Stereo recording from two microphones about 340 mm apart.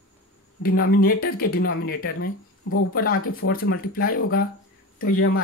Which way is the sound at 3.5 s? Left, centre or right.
Left.